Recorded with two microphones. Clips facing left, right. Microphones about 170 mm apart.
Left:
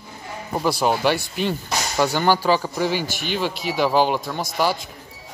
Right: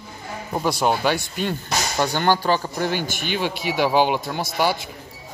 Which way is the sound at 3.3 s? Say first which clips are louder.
Even; 60° right (ahead or behind).